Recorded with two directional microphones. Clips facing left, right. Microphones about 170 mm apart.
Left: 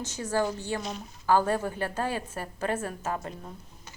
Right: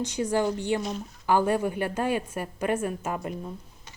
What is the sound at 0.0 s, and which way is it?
A woman's voice, 15° right (ahead or behind).